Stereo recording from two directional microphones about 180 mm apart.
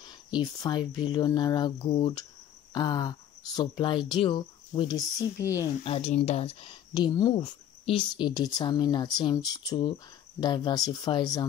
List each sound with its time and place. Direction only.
0.0 s speech: 25° left (ahead or behind)